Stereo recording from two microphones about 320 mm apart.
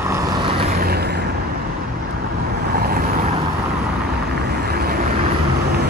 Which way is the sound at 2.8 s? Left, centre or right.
Right.